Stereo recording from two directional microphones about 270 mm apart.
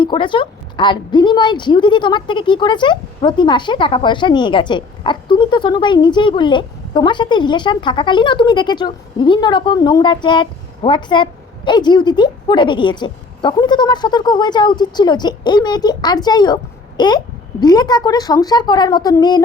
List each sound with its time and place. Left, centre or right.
0.0 s a woman's voice: centre